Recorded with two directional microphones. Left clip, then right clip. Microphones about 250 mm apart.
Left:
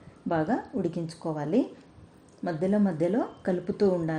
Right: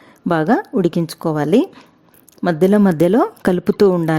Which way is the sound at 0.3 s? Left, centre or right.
Right.